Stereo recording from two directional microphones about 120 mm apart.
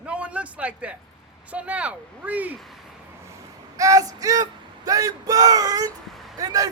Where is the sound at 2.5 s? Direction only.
Centre (ahead or behind).